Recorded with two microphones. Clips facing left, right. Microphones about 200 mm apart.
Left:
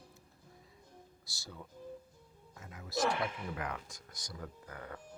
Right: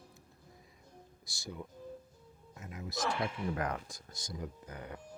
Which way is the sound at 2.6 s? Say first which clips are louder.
Right 6 dB; 20° right (ahead or behind).